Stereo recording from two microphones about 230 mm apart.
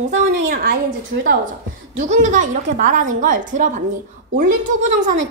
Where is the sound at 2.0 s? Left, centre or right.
Right.